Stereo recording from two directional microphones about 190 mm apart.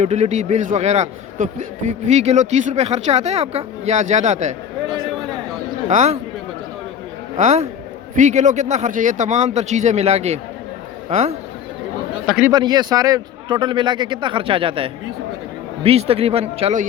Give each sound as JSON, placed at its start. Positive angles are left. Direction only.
{"t": 0.0, "sound": "a man's voice", "side_deg": -35}
{"t": 5.9, "sound": "a man's voice", "side_deg": -40}
{"t": 7.3, "sound": "a man's voice", "side_deg": -35}
{"t": 12.2, "sound": "speech", "side_deg": 0}
{"t": 12.5, "sound": "a man's voice", "side_deg": -20}